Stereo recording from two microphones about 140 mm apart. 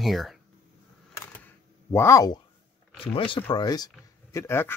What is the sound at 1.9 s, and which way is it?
Speech, 20° left (ahead or behind).